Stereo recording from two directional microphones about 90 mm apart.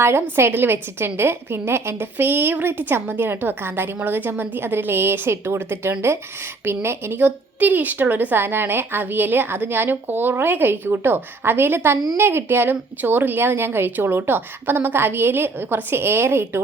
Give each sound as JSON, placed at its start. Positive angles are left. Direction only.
{"t": 0.0, "sound": "a woman's voice", "side_deg": -25}